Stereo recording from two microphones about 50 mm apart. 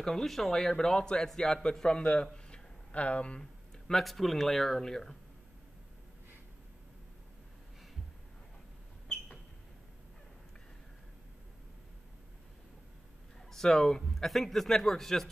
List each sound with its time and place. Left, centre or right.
0.0 s a man's voice: centre
2.3 s a sound: centre
3.3 s speech: centre
13.5 s a man's voice: centre